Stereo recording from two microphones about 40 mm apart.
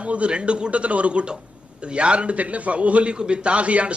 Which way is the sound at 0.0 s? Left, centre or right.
Right.